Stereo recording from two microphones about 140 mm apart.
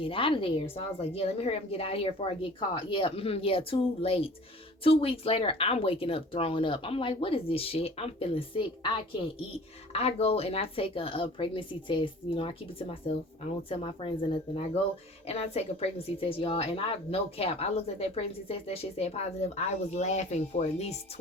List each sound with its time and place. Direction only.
0.0 s speech: 40° left (ahead or behind)